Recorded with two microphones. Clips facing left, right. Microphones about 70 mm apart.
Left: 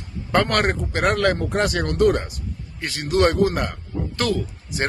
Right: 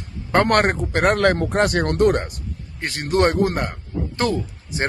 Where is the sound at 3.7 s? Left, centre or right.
Right.